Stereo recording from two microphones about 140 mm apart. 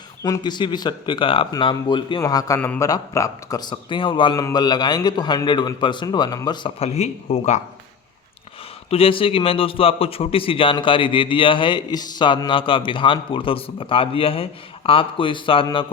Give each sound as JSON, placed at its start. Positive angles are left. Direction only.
{"t": 0.2, "sound": "a man's voice", "side_deg": 30}
{"t": 8.9, "sound": "a man's voice", "side_deg": 40}